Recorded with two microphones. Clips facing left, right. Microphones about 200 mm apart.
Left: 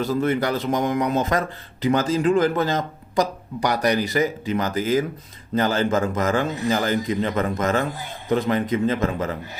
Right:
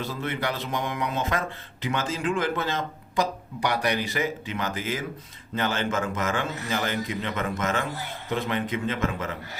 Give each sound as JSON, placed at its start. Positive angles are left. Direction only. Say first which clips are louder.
{"t": 0.0, "sound": "speech", "louder": "left 8 dB", "side_deg": 45}